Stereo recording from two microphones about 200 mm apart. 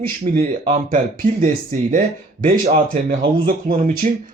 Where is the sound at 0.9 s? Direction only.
40° right (ahead or behind).